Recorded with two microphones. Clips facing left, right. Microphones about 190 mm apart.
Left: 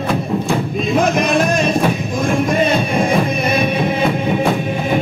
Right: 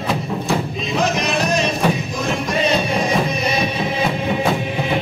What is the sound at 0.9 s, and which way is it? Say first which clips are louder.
Music: left 4 dB; 50° left (ahead or behind).